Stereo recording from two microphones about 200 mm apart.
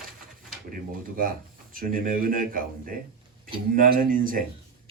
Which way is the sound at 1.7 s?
45° right (ahead or behind).